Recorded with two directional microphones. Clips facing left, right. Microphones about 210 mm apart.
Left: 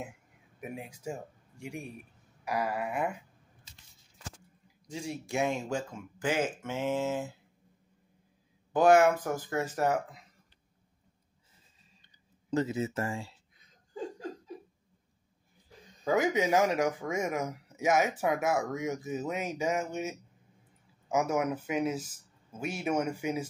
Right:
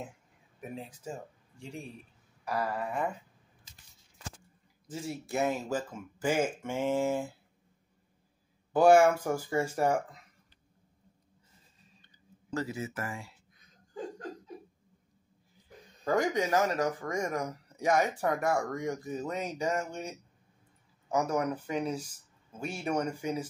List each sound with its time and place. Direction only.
0.6 s speech: 10° left (ahead or behind)
2.4 s a sound: 10° left (ahead or behind)
4.8 s speech: centre (ahead or behind)
8.7 s speech: 10° right (ahead or behind)
12.4 s speech: 20° left (ahead or behind)
16.0 s speech: 5° left (ahead or behind)